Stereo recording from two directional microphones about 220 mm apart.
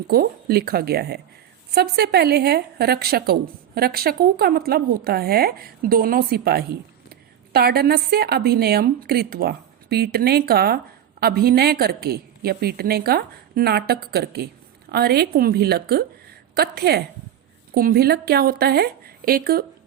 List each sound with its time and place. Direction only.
0.1 s speech: 45° right (ahead or behind)